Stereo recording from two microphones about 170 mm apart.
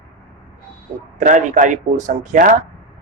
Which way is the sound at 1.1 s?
50° right (ahead or behind).